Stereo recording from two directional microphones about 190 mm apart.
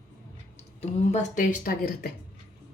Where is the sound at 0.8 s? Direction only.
35° left (ahead or behind).